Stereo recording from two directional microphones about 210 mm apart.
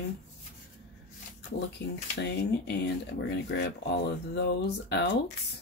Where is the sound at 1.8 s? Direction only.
55° left (ahead or behind).